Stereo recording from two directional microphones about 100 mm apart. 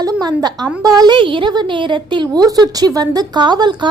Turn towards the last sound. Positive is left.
turn(degrees=-50)  # may be behind; listen again after turning